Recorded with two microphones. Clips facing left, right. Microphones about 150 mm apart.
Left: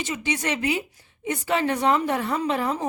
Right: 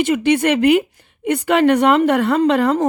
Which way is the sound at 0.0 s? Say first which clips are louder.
Right 12 dB; 60° right (ahead or behind).